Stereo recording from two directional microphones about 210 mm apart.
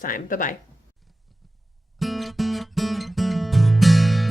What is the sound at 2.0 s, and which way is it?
Music, centre (ahead or behind).